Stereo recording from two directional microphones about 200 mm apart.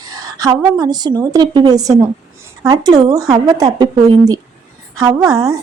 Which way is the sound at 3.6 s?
20° right (ahead or behind).